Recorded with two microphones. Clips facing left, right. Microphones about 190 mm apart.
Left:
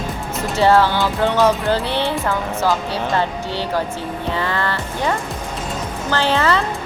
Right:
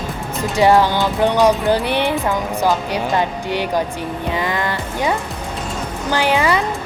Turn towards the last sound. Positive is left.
turn(degrees=-15)  # may be behind; listen again after turning